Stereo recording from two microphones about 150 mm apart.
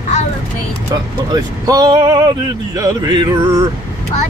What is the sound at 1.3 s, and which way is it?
Speech, 25° right (ahead or behind).